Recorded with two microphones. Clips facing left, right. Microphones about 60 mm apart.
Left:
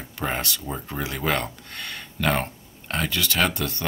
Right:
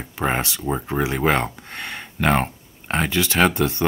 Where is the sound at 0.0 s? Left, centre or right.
Right.